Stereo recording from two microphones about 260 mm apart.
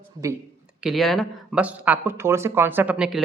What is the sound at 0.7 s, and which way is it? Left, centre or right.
Speech, centre.